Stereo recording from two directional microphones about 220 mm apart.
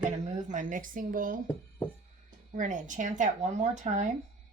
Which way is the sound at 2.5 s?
35° right (ahead or behind).